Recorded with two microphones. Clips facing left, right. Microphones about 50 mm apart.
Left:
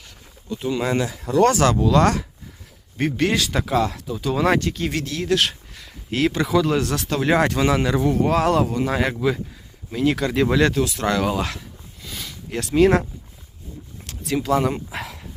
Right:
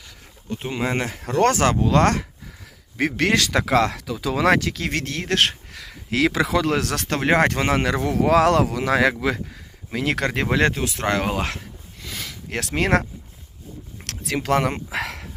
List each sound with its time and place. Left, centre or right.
0.4 s speech: right
0.7 s speech: right
1.0 s speech: right
3.1 s speech: right
4.9 s speech: right
5.7 s speech: right
7.9 s speech: right
9.2 s speech: right
10.2 s speech: right
12.0 s a sound: right
14.1 s bow-wow: right